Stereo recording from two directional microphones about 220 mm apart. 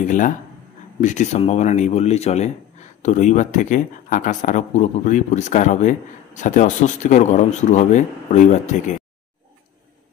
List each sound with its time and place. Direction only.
0.0 s speech: 35° left (ahead or behind)